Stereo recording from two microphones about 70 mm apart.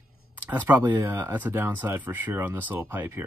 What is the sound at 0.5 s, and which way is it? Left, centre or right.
Speech, right.